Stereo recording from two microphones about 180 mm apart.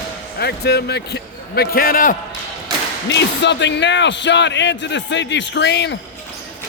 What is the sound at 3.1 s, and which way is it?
Speech, 75° left (ahead or behind).